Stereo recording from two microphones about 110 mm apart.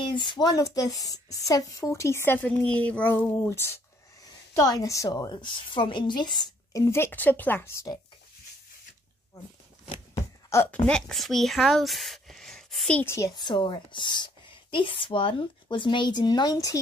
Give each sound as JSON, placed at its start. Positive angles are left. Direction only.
{"t": 0.0, "sound": "a woman's voice", "side_deg": 45}
{"t": 6.8, "sound": "speech", "side_deg": 25}
{"t": 10.7, "sound": "speech", "side_deg": 5}
{"t": 13.0, "sound": "speech", "side_deg": 25}
{"t": 13.4, "sound": "speech", "side_deg": 45}